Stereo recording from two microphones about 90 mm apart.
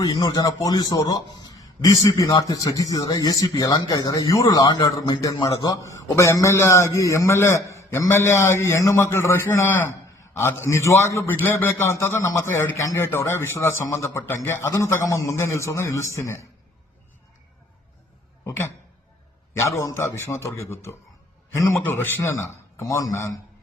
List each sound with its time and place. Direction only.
0.0 s a man's voice: 45° left (ahead or behind)
4.4 s a man's voice: 50° left (ahead or behind); by 16.5 s 35° left (ahead or behind)
18.4 s a man's voice: 30° left (ahead or behind)